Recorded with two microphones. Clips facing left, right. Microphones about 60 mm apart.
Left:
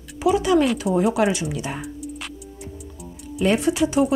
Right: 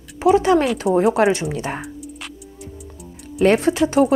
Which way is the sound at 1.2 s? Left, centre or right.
Right.